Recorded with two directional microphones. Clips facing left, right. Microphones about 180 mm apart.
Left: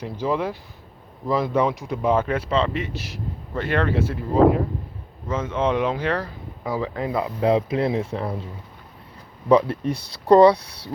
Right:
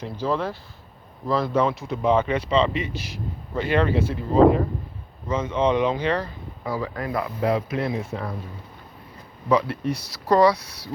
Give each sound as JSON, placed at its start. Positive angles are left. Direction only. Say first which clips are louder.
{"t": 0.0, "sound": "speech", "louder": "left 1 dB", "side_deg": 15}
{"t": 6.7, "sound": "speech", "louder": "left 2 dB", "side_deg": 20}
{"t": 10.2, "sound": "speech", "louder": "left 5 dB", "side_deg": 30}